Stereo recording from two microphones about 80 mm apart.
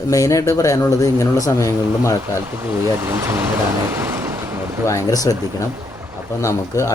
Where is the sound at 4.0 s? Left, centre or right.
Right.